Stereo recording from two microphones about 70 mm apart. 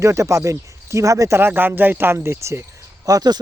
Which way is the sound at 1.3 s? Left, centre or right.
Right.